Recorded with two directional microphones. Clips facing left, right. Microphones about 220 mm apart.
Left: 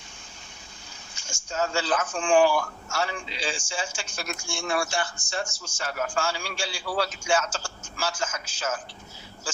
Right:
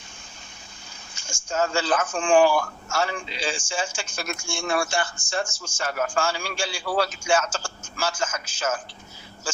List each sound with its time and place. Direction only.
1.1 s speech: 50° right (ahead or behind)